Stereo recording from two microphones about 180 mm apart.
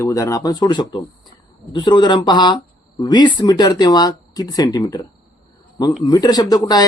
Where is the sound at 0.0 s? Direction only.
15° left (ahead or behind).